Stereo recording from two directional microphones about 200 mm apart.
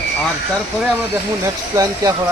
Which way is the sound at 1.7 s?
15° right (ahead or behind).